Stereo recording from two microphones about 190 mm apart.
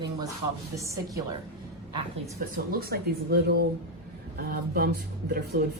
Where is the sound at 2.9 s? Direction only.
55° right (ahead or behind).